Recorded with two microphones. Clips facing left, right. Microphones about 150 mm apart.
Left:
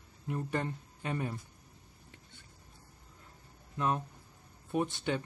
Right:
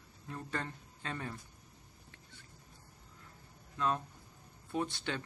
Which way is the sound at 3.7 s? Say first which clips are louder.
Left 2 dB; 20° left (ahead or behind).